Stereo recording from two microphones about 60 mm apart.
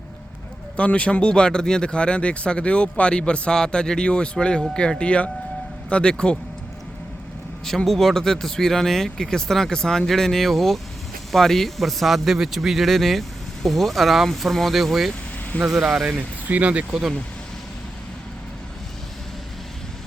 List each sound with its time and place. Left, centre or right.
0.8 s speech: left
7.9 s speech: centre
16.0 s speech: right